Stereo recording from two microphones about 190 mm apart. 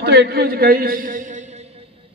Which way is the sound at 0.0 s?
60° right (ahead or behind).